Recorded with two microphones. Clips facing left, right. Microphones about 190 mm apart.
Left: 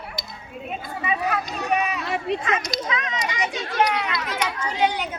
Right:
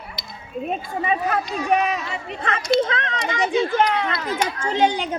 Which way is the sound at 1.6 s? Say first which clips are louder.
Right 3 dB; 65° left (ahead or behind).